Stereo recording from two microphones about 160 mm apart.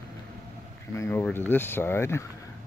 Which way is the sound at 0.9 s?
15° left (ahead or behind).